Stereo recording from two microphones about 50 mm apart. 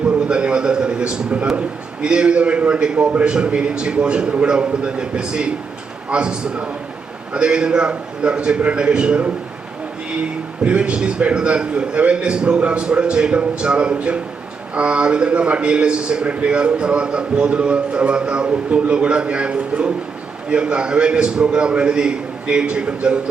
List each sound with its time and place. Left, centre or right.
0.3 s a sound: centre
1.5 s a man's voice: right
10.6 s a man's voice: right